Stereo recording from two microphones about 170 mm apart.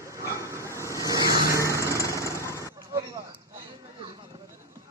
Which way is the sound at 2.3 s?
15° left (ahead or behind).